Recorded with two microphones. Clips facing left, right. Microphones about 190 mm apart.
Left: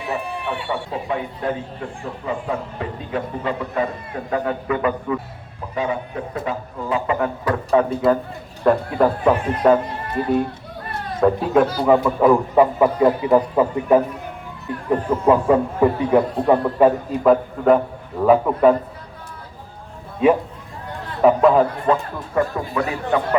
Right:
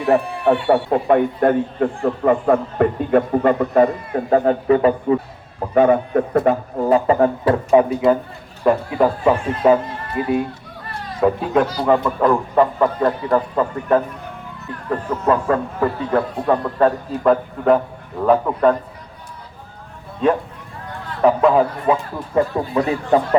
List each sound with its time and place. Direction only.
0.1 s a man's voice: 55° right (ahead or behind)
4.1 s a man's voice: 35° right (ahead or behind)
5.5 s a man's voice: 55° right (ahead or behind); by 7.5 s 35° right (ahead or behind)
7.7 s speech: 15° right (ahead or behind)
8.6 s speech: 5° right (ahead or behind)
11.2 s speech: centre (ahead or behind)
21.2 s speech: centre (ahead or behind)
22.4 s speech: 30° right (ahead or behind)